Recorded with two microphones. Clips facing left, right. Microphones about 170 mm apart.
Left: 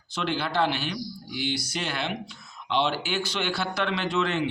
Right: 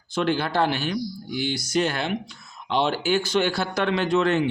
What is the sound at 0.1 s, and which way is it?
Speech, 45° right (ahead or behind).